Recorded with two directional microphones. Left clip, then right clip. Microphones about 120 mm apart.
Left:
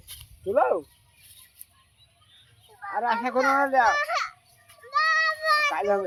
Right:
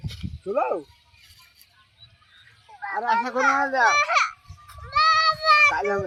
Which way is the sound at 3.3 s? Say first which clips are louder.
Left 1 dB; 15° left (ahead or behind).